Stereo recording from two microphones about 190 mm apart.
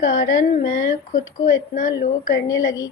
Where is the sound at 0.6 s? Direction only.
70° left (ahead or behind).